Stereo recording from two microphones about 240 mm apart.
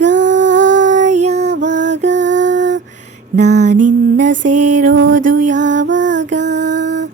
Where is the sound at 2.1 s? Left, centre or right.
Right.